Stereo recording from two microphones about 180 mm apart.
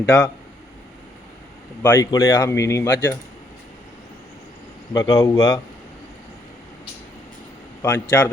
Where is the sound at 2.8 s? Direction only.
75° left (ahead or behind).